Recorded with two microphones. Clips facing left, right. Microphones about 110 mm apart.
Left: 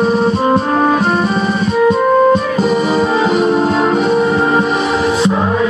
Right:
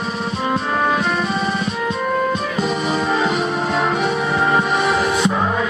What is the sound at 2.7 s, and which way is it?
Music, 35° left (ahead or behind).